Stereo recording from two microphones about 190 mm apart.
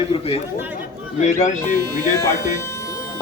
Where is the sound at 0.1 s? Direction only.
30° left (ahead or behind).